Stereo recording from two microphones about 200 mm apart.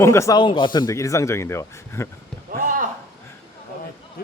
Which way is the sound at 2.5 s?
45° right (ahead or behind).